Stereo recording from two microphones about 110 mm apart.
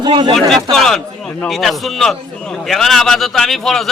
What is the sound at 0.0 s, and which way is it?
Speech, 45° right (ahead or behind).